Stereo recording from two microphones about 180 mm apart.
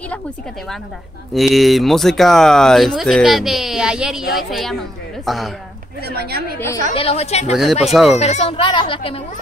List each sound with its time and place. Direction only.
1.3 s speech: centre (ahead or behind)
6.0 s a woman's voice: 60° right (ahead or behind)
7.0 s speech: 35° left (ahead or behind)
7.8 s speech: centre (ahead or behind)
8.2 s speech: 35° left (ahead or behind)